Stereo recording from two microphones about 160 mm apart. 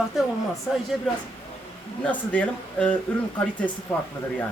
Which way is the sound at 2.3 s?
10° left (ahead or behind).